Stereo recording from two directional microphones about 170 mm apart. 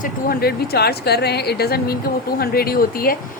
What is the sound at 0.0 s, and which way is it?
A woman's voice, 60° left (ahead or behind).